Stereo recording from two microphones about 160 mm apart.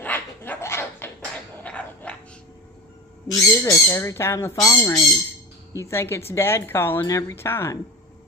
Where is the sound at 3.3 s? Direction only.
20° left (ahead or behind).